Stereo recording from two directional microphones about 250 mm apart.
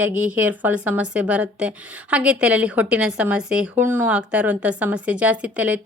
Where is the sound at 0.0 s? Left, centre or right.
Centre.